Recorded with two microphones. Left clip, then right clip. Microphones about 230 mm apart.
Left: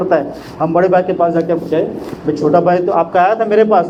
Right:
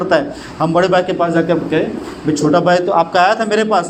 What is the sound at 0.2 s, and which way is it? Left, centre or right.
A man's voice, right.